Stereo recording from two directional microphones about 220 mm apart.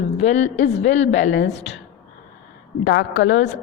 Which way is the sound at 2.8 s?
60° left (ahead or behind).